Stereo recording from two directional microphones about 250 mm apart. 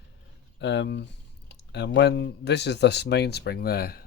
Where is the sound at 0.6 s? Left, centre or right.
Left.